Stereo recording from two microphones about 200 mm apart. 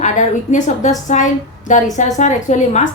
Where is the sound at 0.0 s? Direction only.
35° left (ahead or behind).